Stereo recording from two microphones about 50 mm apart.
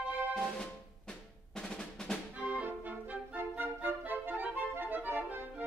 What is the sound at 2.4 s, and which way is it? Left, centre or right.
Music, right.